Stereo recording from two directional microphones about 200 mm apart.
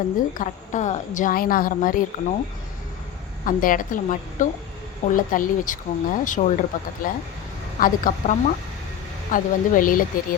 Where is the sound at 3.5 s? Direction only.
40° left (ahead or behind).